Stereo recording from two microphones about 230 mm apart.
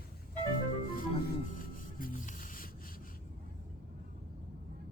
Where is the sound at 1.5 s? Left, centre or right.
Left.